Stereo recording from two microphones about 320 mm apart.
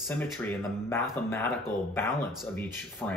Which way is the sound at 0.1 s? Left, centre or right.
Centre.